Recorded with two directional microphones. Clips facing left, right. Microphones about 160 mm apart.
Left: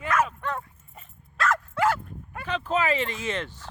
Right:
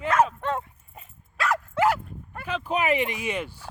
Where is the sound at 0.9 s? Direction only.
10° right (ahead or behind).